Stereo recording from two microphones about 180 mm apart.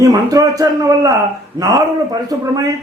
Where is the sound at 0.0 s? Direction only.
20° right (ahead or behind).